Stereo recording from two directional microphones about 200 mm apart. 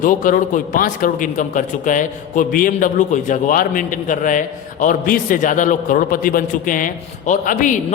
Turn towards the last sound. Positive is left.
turn(degrees=40)  # may be behind; listen again after turning